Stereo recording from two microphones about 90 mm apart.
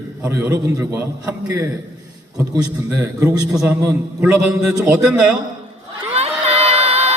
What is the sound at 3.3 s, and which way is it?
Speech, 10° right (ahead or behind).